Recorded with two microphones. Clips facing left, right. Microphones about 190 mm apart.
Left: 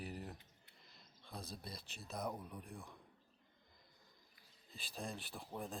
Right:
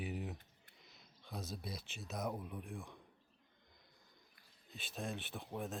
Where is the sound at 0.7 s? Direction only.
Centre (ahead or behind).